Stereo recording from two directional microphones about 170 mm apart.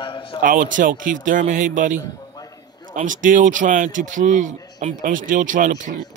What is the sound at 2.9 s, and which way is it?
A man's voice, 50° right (ahead or behind).